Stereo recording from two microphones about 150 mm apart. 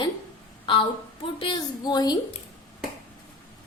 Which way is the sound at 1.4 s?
30° left (ahead or behind).